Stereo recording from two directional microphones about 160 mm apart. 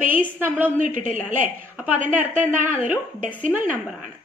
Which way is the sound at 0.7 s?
55° right (ahead or behind).